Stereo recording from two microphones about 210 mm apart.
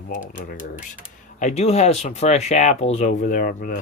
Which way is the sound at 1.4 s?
30° left (ahead or behind).